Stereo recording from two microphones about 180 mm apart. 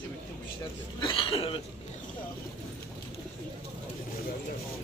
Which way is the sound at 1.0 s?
30° left (ahead or behind).